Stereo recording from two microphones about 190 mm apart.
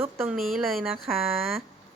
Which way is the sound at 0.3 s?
Centre (ahead or behind).